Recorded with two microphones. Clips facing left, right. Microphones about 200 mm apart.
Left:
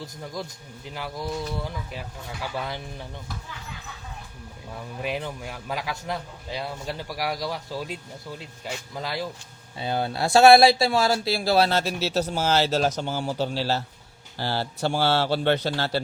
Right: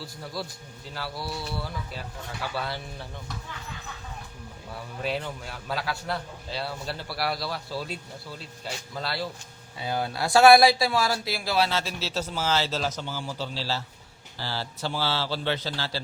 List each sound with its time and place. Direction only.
0.9 s a man's voice: 15° left (ahead or behind)
5.0 s a man's voice: 15° left (ahead or behind)
9.7 s speech: 25° left (ahead or behind)
11.8 s speech: 60° left (ahead or behind)